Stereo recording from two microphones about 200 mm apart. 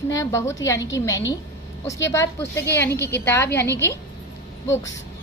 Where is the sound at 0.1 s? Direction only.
15° left (ahead or behind).